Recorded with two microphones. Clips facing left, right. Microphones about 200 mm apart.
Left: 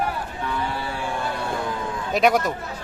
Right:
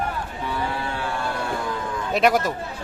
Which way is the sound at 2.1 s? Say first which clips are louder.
Even; centre (ahead or behind).